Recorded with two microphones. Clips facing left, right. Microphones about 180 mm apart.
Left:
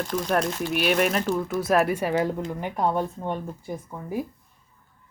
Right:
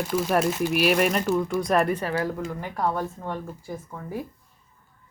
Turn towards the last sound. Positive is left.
turn(degrees=20)  # may be behind; listen again after turning